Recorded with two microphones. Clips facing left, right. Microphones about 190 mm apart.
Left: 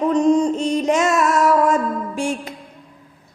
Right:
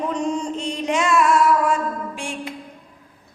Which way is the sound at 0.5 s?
40° left (ahead or behind).